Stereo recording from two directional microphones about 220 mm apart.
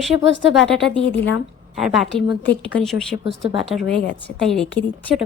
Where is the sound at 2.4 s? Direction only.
55° left (ahead or behind).